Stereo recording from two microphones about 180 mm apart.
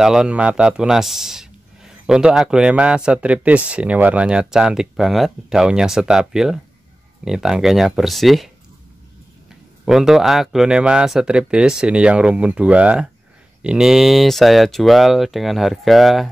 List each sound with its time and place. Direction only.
0.0 s speech: 5° right (ahead or behind)
9.8 s speech: centre (ahead or behind)